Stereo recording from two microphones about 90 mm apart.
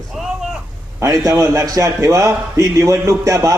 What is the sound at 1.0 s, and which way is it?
A man's voice, 35° right (ahead or behind).